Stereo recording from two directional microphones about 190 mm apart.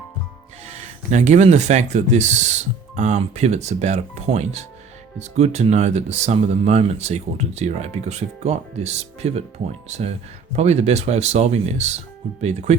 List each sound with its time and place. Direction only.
0.6 s speech: 35° right (ahead or behind)